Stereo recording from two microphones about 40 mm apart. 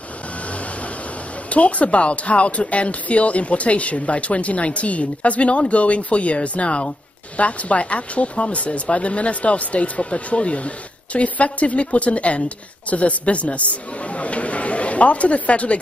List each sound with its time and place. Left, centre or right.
1.5 s speech: left